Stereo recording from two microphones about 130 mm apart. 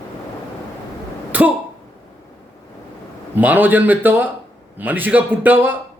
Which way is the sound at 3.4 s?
15° right (ahead or behind).